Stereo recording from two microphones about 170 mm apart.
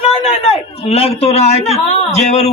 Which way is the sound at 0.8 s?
35° left (ahead or behind).